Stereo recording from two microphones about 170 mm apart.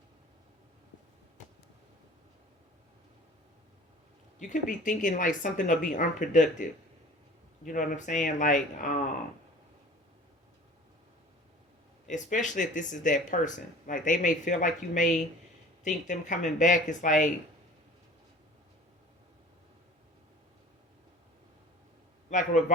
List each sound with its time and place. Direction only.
4.4 s speech: 50° left (ahead or behind)
12.0 s speech: 45° left (ahead or behind)
22.3 s a sound: 45° left (ahead or behind)